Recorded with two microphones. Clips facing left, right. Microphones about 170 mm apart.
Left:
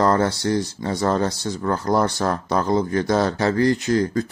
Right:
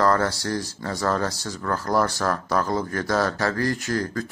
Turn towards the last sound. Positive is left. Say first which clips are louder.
# left 6 dB
turn(degrees=20)  # may be behind; listen again after turning